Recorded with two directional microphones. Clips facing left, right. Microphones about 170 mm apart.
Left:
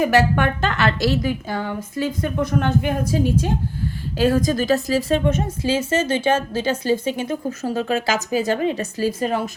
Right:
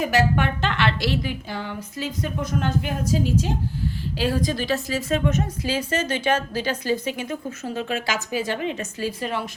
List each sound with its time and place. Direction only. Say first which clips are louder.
0.0 s a woman's voice: left 4 dB; 55° left (ahead or behind); by 9.4 s 40° left (ahead or behind)